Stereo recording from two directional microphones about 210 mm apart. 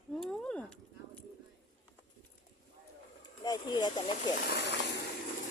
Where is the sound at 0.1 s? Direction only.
5° left (ahead or behind).